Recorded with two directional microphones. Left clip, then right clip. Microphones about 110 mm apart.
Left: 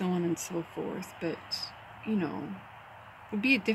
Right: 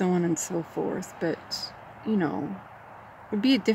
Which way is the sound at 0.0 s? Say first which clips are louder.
Right 6 dB; 25° right (ahead or behind).